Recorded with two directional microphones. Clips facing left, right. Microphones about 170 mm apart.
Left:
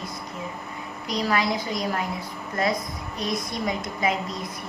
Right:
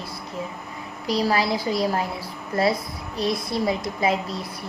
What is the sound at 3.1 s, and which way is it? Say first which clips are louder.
Speech: right 5 dB; 30° right (ahead or behind).